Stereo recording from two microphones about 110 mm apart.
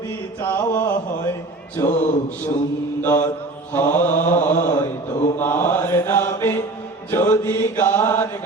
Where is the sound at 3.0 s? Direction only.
20° left (ahead or behind).